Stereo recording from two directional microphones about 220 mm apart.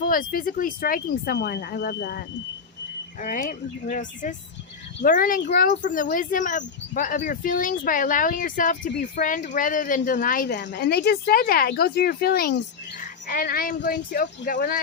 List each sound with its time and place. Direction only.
0.0 s speech: 40° left (ahead or behind)